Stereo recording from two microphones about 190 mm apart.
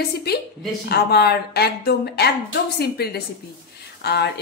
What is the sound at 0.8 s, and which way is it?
Speech, 60° left (ahead or behind).